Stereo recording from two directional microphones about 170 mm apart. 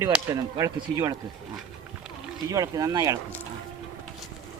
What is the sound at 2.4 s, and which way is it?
Speech, 20° right (ahead or behind).